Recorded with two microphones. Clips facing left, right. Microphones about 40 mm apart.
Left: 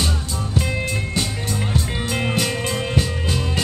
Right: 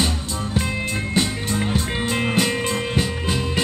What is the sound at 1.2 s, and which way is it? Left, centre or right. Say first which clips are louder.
Music: right 6 dB; right.